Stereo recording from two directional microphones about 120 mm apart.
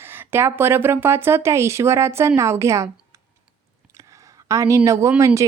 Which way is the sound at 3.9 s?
25° right (ahead or behind).